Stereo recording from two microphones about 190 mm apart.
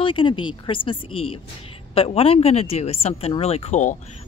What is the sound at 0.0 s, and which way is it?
Speech, 25° left (ahead or behind).